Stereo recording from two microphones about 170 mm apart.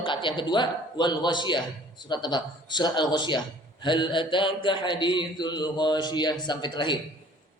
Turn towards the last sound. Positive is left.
turn(degrees=25)  # may be behind; listen again after turning